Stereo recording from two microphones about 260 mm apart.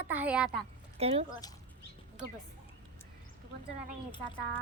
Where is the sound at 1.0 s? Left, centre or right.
Right.